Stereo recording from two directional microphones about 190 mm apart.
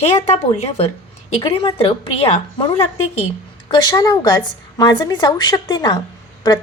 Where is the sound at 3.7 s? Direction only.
20° left (ahead or behind).